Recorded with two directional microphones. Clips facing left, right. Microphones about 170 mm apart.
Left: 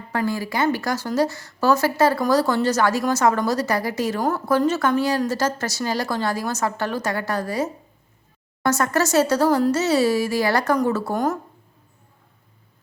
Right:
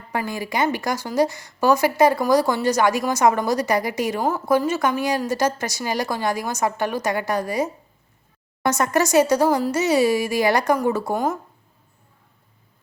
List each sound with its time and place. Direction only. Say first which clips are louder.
0.1 s speech: left 2 dB; 15° right (ahead or behind)